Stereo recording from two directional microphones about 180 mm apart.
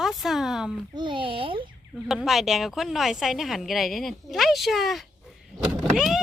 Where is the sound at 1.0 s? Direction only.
25° right (ahead or behind).